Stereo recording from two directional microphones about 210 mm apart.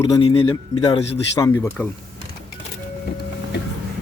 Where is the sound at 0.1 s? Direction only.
25° left (ahead or behind).